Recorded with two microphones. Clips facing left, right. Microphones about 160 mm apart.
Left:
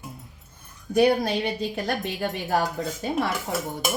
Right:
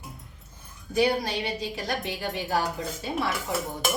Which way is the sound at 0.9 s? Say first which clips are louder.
Left 4 dB; 55° left (ahead or behind).